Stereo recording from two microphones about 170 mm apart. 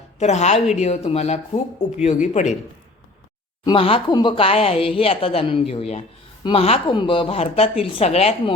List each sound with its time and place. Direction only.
0.2 s speech: 40° left (ahead or behind)
3.7 s speech: 30° left (ahead or behind)